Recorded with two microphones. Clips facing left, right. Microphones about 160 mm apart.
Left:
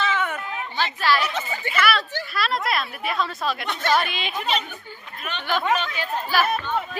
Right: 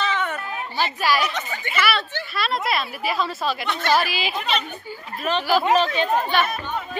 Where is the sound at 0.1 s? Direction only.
10° left (ahead or behind).